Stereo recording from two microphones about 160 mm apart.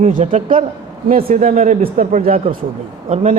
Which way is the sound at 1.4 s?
40° right (ahead or behind).